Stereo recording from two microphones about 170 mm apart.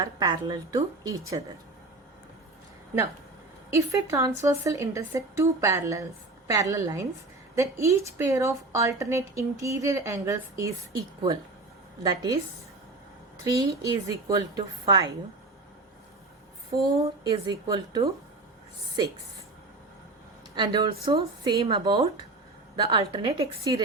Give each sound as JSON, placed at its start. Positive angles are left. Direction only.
{"t": 0.0, "sound": "a woman's voice", "side_deg": -25}
{"t": 3.8, "sound": "a woman's voice", "side_deg": -15}
{"t": 13.4, "sound": "a woman's voice", "side_deg": -20}
{"t": 17.2, "sound": "a woman's voice", "side_deg": -25}
{"t": 20.6, "sound": "a woman's voice", "side_deg": -25}